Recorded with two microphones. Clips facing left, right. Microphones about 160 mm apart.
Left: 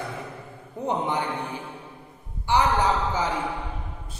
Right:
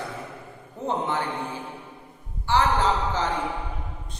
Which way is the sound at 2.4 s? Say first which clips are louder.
Even; 15° left (ahead or behind).